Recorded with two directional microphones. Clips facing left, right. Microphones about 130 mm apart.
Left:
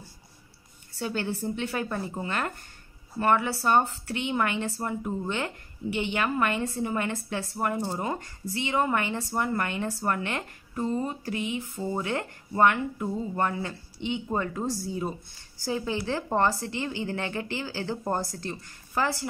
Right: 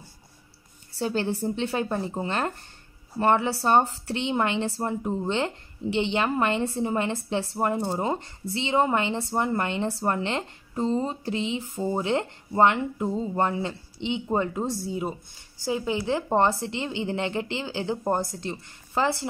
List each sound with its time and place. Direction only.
0.9 s speech: 30° right (ahead or behind)